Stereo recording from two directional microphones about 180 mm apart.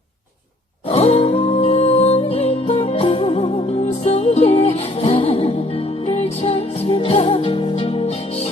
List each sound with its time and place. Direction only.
0.9 s music: 35° left (ahead or behind)